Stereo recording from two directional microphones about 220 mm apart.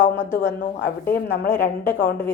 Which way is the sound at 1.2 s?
50° left (ahead or behind).